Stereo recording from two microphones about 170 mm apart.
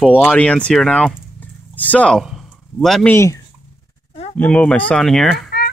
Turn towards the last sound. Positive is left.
turn(degrees=0)  # may be behind; listen again after turning